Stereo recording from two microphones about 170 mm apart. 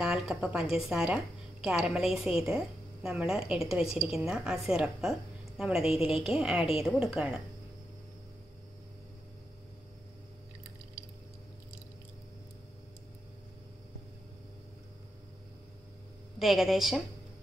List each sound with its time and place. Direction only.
0.0 s a woman's voice: 5° right (ahead or behind)
5.9 s a woman's voice: 35° left (ahead or behind)
6.3 s a woman's voice: 5° right (ahead or behind)
16.3 s a woman's voice: centre (ahead or behind)